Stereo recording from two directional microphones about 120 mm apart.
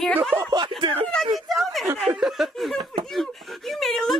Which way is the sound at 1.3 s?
Centre (ahead or behind).